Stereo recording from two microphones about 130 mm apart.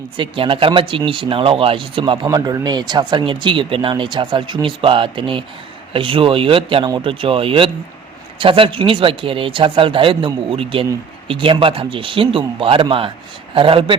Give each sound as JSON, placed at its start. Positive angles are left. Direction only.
{"t": 0.2, "sound": "speech", "side_deg": -40}
{"t": 2.2, "sound": "speech", "side_deg": -30}